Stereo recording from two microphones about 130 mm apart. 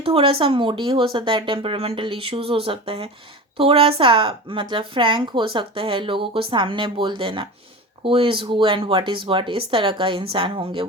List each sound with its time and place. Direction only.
0.0 s a woman's voice: 45° right (ahead or behind)